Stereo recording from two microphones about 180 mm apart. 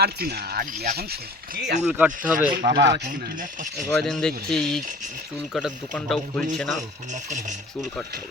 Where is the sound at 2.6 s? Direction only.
70° right (ahead or behind).